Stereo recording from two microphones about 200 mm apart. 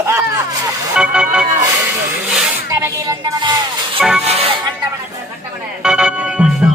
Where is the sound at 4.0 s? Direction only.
Centre (ahead or behind).